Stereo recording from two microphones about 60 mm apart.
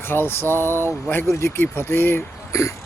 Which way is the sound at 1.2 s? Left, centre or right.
Left.